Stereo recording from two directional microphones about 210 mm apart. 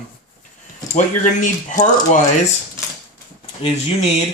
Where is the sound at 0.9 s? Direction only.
35° left (ahead or behind).